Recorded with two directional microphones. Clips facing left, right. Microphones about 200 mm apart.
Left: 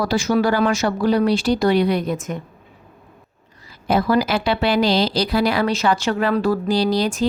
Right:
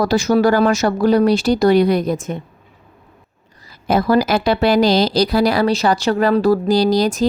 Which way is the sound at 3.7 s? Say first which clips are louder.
Right 3 dB; 40° right (ahead or behind).